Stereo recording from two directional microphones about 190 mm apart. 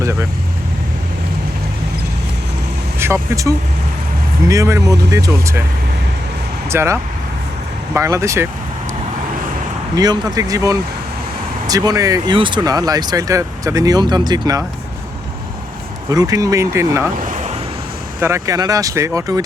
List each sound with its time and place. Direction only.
0.0 s vehicle: 15° right (ahead or behind)
3.0 s speech: 15° right (ahead or behind)
6.7 s speech: 15° right (ahead or behind)
9.9 s speech: 20° right (ahead or behind)
16.0 s speech: 20° right (ahead or behind)
17.2 s vehicle: 40° right (ahead or behind)
18.2 s speech: 15° right (ahead or behind)